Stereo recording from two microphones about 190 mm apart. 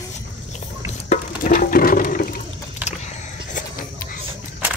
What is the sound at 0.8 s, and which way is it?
Toilet flush, 40° left (ahead or behind).